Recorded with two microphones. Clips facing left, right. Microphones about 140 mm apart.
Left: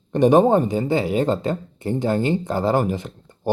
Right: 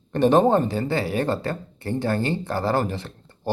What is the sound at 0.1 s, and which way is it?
Speech, 15° left (ahead or behind).